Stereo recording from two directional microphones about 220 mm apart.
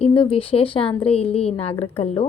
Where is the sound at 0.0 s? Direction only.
25° left (ahead or behind).